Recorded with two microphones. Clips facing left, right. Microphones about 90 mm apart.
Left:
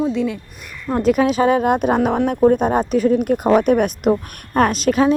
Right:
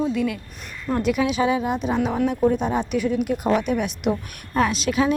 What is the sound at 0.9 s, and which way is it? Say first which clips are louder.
Speech: left 5 dB; 40° left (ahead or behind).